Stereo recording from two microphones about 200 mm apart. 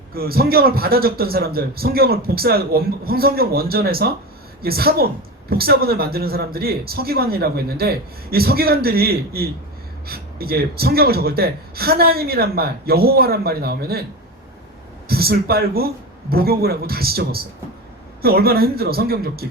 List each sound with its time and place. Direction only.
0.1 s a man's voice: 50° right (ahead or behind)
15.0 s a man's voice: 50° right (ahead or behind)